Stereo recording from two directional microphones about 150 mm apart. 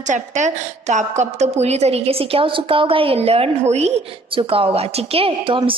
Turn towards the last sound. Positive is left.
turn(degrees=-35)  # may be behind; listen again after turning